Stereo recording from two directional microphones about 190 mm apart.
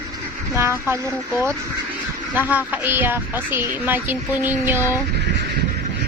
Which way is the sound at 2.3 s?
10° right (ahead or behind).